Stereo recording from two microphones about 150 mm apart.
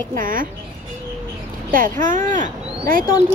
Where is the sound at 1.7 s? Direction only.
65° right (ahead or behind).